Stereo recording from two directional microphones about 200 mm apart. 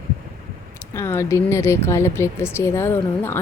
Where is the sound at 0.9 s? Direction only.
15° left (ahead or behind).